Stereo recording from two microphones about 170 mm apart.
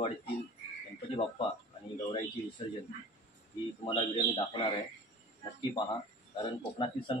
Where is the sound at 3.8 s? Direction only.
30° left (ahead or behind).